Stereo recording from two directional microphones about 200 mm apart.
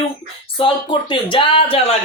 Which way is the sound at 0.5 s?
25° left (ahead or behind).